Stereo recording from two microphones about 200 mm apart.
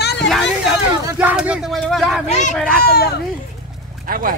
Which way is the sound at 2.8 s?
50° left (ahead or behind).